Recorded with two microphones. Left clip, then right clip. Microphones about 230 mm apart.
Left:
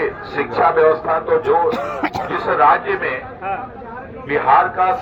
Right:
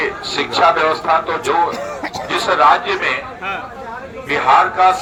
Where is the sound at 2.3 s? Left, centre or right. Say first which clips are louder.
Right 2 dB; right.